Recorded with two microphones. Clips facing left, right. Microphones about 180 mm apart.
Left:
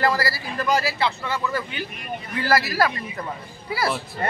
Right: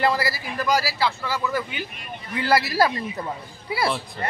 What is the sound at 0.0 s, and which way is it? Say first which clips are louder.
Speech: even; 20° right (ahead or behind).